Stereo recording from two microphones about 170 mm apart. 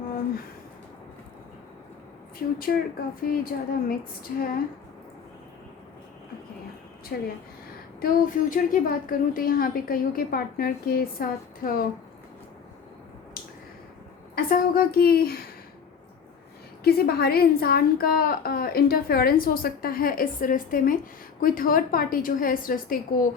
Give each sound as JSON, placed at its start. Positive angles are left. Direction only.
{"t": 2.4, "sound": "a woman's voice", "side_deg": 55}
{"t": 7.1, "sound": "a woman's voice", "side_deg": 60}
{"t": 14.3, "sound": "a woman's voice", "side_deg": 60}
{"t": 16.8, "sound": "a woman's voice", "side_deg": 65}